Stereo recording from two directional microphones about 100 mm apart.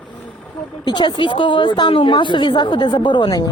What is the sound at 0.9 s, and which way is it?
A woman's voice, 45° left (ahead or behind).